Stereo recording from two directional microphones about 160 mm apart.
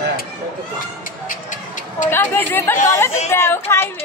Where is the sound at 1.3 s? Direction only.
55° left (ahead or behind).